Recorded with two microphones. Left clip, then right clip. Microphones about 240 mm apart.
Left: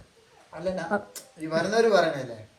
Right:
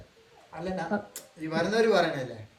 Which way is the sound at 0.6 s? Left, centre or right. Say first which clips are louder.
Left 4 dB; centre.